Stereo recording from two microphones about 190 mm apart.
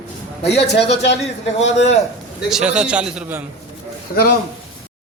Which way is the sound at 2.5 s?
5° right (ahead or behind).